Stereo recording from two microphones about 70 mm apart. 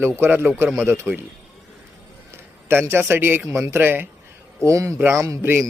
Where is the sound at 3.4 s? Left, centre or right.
Right.